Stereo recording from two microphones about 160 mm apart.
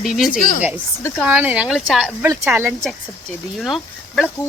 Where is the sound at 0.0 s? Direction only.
Centre (ahead or behind).